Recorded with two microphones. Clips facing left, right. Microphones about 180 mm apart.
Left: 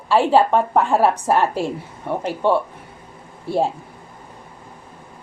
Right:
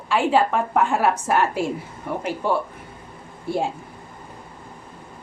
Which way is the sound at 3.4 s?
30° left (ahead or behind).